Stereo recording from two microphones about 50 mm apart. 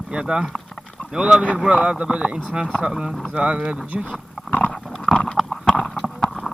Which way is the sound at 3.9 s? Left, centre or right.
Right.